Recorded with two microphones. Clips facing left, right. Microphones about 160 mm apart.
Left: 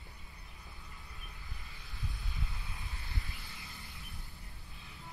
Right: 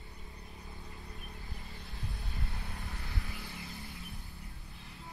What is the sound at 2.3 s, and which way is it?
Vehicle, 65° right (ahead or behind).